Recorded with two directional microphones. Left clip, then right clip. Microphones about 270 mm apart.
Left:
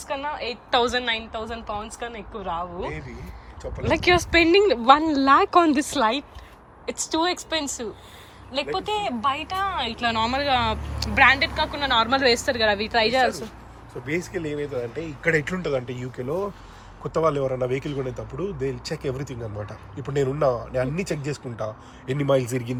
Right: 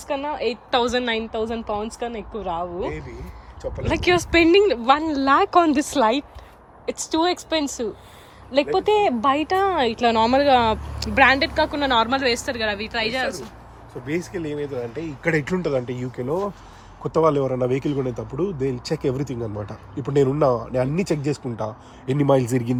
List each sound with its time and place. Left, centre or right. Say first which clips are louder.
0.1 s speech: right 4 dB; centre
2.0 s speech: right 4 dB; centre
2.5 s speech: right 2 dB; centre
14.1 s speech: right 1 dB; right